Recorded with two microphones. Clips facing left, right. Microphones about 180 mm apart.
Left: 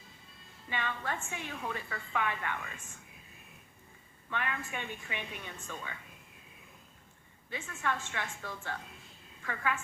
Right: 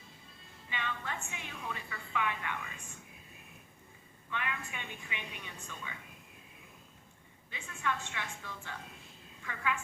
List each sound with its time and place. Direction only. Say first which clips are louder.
0.7 s a woman's voice: left 3 dB; 45° left (ahead or behind)
4.3 s a woman's voice: left 3 dB; 45° left (ahead or behind)
7.5 s a woman's voice: left 2 dB; 45° left (ahead or behind)